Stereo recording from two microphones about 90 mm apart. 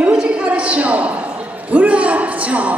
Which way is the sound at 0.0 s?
10° right (ahead or behind).